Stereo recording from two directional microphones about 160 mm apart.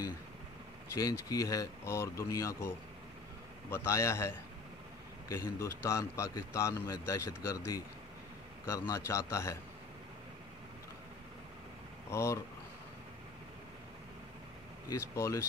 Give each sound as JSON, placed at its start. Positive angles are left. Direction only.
{"t": 0.9, "sound": "speech", "side_deg": 20}
{"t": 3.7, "sound": "speech", "side_deg": 15}
{"t": 8.6, "sound": "speech", "side_deg": 20}
{"t": 12.1, "sound": "speech", "side_deg": 15}
{"t": 14.9, "sound": "speech", "side_deg": 15}